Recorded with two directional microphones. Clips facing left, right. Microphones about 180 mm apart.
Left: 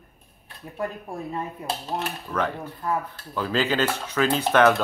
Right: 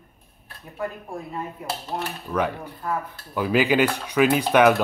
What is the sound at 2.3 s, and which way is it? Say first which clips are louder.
Speech: right 3 dB; 10° right (ahead or behind).